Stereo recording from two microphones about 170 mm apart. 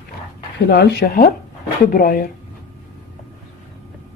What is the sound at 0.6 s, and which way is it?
Speech, 75° left (ahead or behind).